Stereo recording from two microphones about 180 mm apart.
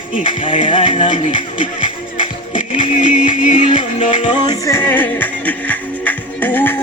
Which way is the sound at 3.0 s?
45° left (ahead or behind).